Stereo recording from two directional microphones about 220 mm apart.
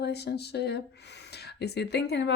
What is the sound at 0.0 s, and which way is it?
Speech, 50° left (ahead or behind).